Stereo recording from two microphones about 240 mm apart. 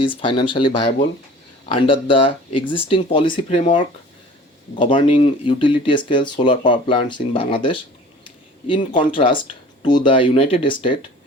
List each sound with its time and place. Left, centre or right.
0.0 s speech: left